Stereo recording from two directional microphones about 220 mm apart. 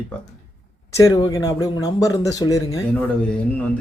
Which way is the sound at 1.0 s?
15° left (ahead or behind).